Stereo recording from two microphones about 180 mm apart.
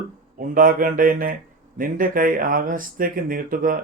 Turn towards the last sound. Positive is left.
turn(degrees=-50)  # may be behind; listen again after turning